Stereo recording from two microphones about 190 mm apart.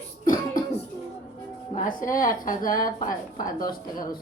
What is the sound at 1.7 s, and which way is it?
A woman's voice, 45° left (ahead or behind).